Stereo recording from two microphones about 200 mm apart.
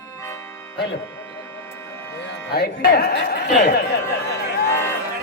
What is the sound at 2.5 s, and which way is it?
Music, 50° left (ahead or behind).